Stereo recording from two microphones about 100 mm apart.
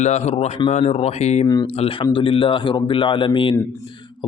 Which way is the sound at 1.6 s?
75° left (ahead or behind).